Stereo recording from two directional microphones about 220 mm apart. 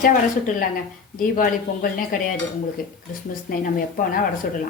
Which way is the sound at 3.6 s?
40° left (ahead or behind).